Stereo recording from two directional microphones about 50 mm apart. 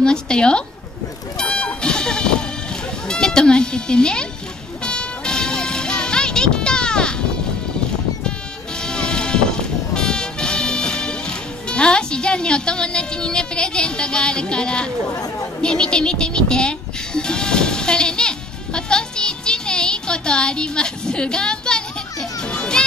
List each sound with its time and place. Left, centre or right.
0.0 s speech: centre
1.4 s music: left
8.7 s music: centre